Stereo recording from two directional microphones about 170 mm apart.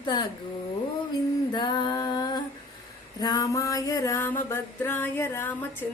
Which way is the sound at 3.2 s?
25° left (ahead or behind).